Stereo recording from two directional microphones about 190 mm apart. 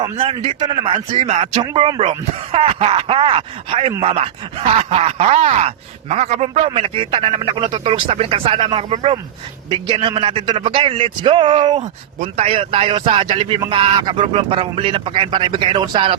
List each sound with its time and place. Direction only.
0.0 s a man's voice: 30° right (ahead or behind)